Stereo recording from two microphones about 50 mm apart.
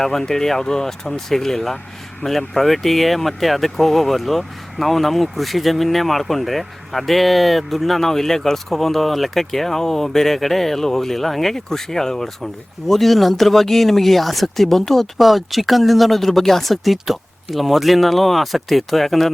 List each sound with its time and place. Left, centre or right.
0.0 s speech: centre